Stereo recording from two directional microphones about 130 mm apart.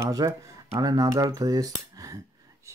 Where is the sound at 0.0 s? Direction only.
25° right (ahead or behind).